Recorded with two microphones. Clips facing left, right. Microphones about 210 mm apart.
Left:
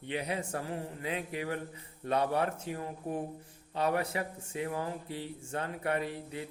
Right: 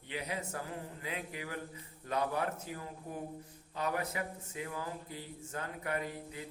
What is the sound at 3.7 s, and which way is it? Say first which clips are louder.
Speech: left 5 dB; 30° left (ahead or behind).